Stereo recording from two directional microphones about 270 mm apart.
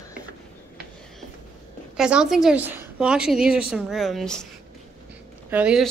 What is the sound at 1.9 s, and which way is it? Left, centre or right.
A woman's voice, centre.